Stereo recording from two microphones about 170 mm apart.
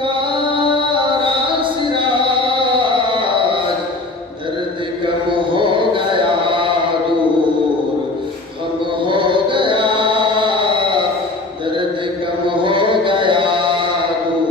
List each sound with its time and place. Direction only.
1.6 s music: 30° right (ahead or behind)
5.6 s chant: 30° right (ahead or behind)
9.0 s chant: 30° right (ahead or behind)
12.6 s chant: 30° right (ahead or behind)